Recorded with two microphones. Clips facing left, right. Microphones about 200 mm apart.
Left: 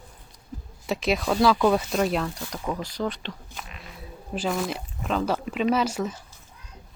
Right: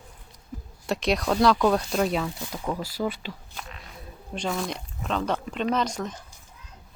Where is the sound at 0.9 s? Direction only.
Centre (ahead or behind).